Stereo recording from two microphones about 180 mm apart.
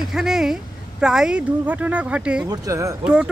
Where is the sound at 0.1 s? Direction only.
5° right (ahead or behind).